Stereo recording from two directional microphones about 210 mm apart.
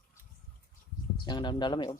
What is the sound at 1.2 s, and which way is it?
Speech, 20° left (ahead or behind).